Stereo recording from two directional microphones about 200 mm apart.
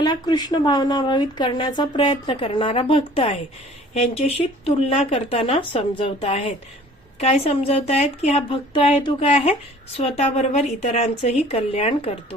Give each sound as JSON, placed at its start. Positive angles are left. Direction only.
{"t": 0.0, "sound": "a woman's voice", "side_deg": 20}